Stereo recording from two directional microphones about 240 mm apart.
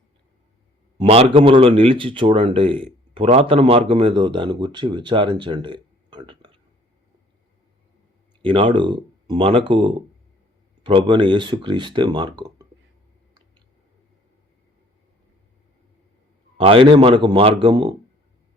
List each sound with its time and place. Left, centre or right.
0.9 s speech: right
8.4 s speech: right
16.6 s speech: right